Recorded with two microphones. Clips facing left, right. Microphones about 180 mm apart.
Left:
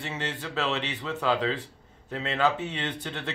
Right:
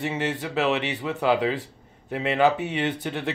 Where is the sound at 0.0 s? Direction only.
15° right (ahead or behind).